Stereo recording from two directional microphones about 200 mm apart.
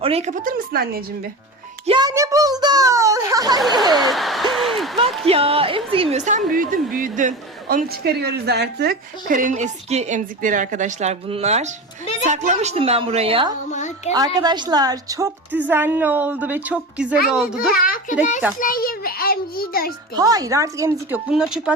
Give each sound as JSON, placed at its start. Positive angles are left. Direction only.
{"t": 0.0, "sound": "speech", "side_deg": -30}
{"t": 1.9, "sound": "a woman's voice", "side_deg": -20}
{"t": 4.1, "sound": "a sound", "side_deg": 0}
{"t": 5.2, "sound": "a woman's voice", "side_deg": -30}
{"t": 13.7, "sound": "a sound", "side_deg": 35}
{"t": 14.4, "sound": "a woman's voice", "side_deg": -20}
{"t": 17.7, "sound": "a child's voice", "side_deg": 45}
{"t": 20.1, "sound": "a woman's voice", "side_deg": -20}